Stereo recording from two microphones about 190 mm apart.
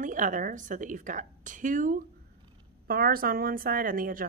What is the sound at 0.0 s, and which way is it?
Speech, 45° right (ahead or behind).